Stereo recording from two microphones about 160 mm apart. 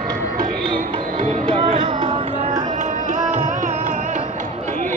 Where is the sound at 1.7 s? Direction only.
35° right (ahead or behind).